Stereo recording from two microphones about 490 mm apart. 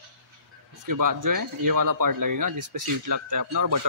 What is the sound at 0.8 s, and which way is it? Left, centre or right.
Speech, right.